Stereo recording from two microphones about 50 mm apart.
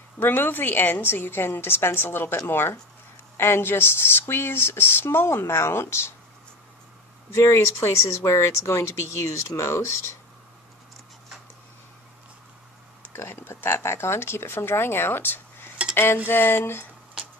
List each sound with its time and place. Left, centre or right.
0.2 s speech: left
7.3 s speech: left
13.1 s speech: left
15.9 s cutlery: left
16.3 s speech: left